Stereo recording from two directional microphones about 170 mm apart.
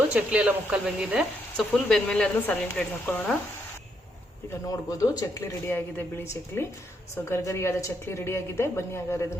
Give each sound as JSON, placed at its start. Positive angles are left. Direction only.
{"t": 0.1, "sound": "speech", "side_deg": -10}
{"t": 4.7, "sound": "speech", "side_deg": 20}